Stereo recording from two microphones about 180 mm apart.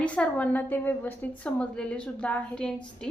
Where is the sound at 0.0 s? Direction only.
5° left (ahead or behind).